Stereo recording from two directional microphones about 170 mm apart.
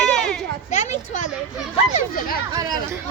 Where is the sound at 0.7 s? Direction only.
45° left (ahead or behind).